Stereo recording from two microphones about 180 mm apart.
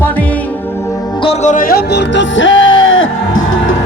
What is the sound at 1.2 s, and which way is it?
Music, 35° left (ahead or behind).